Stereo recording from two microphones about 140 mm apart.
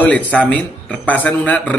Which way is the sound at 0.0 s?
10° left (ahead or behind).